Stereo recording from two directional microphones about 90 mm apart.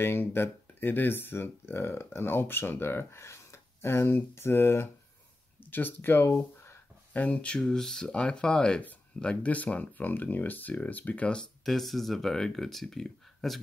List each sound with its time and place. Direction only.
0.0 s speech: 25° left (ahead or behind); by 13.6 s 5° left (ahead or behind)